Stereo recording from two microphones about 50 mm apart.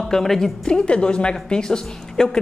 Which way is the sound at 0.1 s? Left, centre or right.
Centre.